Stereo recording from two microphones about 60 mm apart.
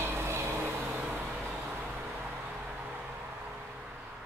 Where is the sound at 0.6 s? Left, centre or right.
Right.